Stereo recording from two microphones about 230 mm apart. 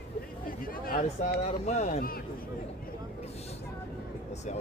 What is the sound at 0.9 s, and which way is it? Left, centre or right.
Speech, left.